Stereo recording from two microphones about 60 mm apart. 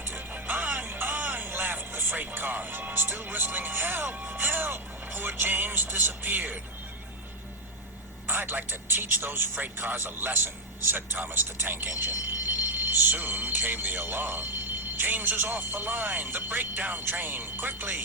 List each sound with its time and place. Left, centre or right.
0.0 s music: right
8.3 s speech: right